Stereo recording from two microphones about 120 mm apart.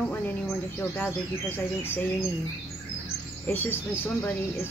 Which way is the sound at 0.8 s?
15° left (ahead or behind).